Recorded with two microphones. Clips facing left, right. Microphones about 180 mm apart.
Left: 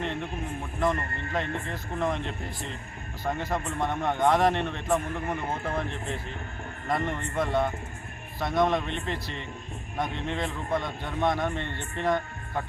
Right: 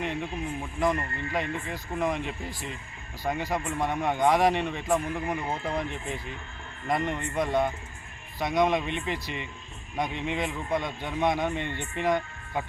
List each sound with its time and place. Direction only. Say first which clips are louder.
0.0 s a man's voice: right 1 dB; 5° right (ahead or behind)
8.4 s speech: even; centre (ahead or behind)